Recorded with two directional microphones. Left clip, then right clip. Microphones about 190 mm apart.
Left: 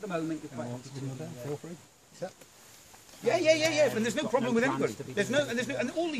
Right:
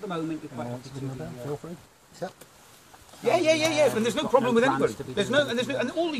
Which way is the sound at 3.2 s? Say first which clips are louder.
Right 3 dB; 5° left (ahead or behind).